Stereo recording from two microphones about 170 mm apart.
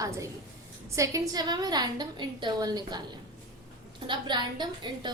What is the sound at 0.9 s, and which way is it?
A woman's voice, 20° right (ahead or behind).